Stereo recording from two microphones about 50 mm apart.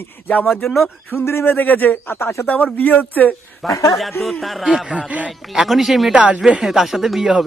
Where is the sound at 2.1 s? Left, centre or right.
Left.